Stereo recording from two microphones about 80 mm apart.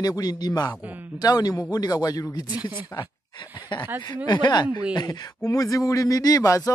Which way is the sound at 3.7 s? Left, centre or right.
Left.